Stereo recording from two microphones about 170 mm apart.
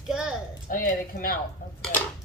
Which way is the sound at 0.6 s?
55° left (ahead or behind).